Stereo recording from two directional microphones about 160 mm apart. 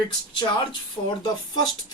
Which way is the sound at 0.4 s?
30° left (ahead or behind).